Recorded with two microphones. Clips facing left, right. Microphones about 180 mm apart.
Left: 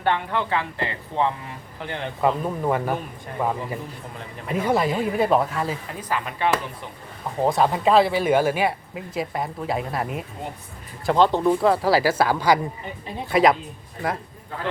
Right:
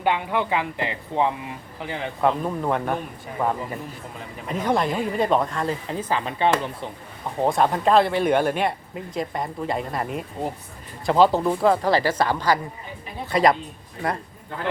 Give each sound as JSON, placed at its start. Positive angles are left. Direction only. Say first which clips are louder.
{"t": 0.0, "sound": "speech", "louder": "right 1 dB", "side_deg": -15}
{"t": 1.8, "sound": "speech", "louder": "even", "side_deg": -5}
{"t": 5.9, "sound": "speech", "louder": "right 3 dB", "side_deg": -25}
{"t": 7.4, "sound": "speech", "louder": "even", "side_deg": 0}